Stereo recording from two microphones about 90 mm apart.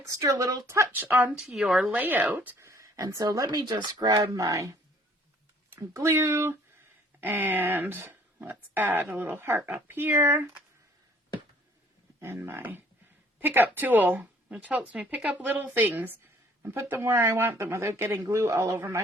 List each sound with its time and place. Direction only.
0.1 s speech: 40° right (ahead or behind)
0.9 s speech: 15° right (ahead or behind)
1.4 s speech: 5° right (ahead or behind)
1.9 s speech: 20° right (ahead or behind)
2.6 s a sound: 35° right (ahead or behind)
3.1 s speech: 40° right (ahead or behind)
4.4 s speech: 35° right (ahead or behind)
5.9 s speech: 30° right (ahead or behind)
12.2 s speech: 25° right (ahead or behind)